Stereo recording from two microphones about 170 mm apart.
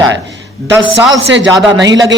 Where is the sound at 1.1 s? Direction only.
90° right.